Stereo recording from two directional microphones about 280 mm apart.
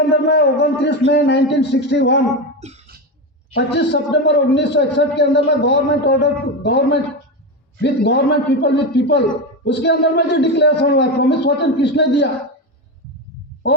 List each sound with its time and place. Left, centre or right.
0.3 s a man's voice: left
2.6 s music: right
3.5 s a man's voice: left